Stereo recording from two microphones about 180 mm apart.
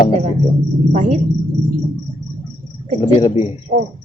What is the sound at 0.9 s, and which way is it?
Speech, 45° right (ahead or behind).